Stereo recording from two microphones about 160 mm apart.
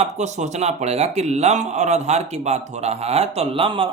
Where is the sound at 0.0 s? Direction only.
45° right (ahead or behind).